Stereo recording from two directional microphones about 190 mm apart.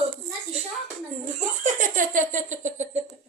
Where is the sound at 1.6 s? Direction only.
45° right (ahead or behind).